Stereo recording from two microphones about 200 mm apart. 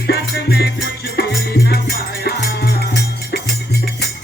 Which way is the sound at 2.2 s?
55° left (ahead or behind).